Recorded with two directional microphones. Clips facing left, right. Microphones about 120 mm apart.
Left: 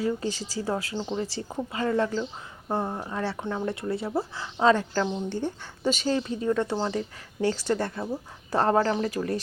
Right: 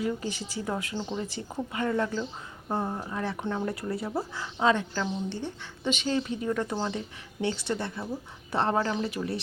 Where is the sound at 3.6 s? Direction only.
25° left (ahead or behind).